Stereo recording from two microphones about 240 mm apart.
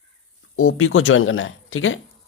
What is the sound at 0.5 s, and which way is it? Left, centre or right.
Speech, left.